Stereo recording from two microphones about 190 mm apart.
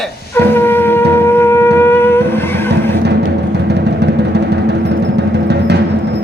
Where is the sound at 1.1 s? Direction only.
10° left (ahead or behind).